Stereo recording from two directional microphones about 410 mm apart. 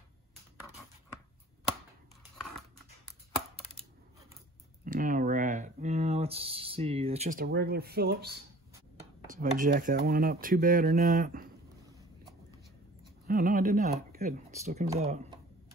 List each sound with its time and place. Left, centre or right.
4.8 s a sound: centre
9.3 s speech: centre
13.3 s speech: centre